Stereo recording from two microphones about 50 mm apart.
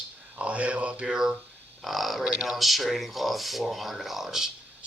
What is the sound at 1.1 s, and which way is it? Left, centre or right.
Speech, centre.